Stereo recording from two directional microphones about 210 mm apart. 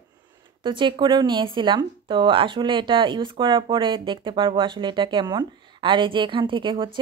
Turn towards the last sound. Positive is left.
turn(degrees=-20)  # may be behind; listen again after turning